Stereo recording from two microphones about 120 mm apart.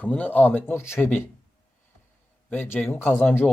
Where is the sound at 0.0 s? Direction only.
15° left (ahead or behind).